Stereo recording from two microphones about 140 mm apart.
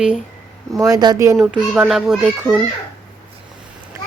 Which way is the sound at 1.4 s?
5° right (ahead or behind).